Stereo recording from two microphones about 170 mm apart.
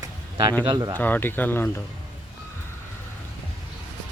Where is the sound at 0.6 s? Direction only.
25° right (ahead or behind).